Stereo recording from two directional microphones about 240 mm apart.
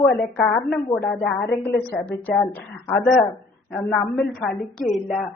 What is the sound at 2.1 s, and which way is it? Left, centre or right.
A woman's voice, centre.